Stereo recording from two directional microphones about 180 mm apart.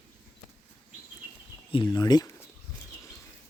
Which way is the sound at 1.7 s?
25° left (ahead or behind).